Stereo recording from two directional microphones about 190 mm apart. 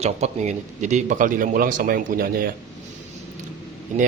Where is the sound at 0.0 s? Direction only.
35° right (ahead or behind).